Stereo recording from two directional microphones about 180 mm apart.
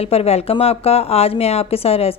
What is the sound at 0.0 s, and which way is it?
A woman's voice, 35° left (ahead or behind).